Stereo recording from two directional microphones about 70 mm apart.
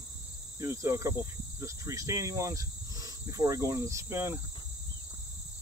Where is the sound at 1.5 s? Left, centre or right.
Right.